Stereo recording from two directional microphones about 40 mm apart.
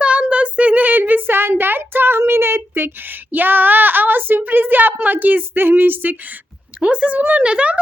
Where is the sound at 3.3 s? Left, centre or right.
Right.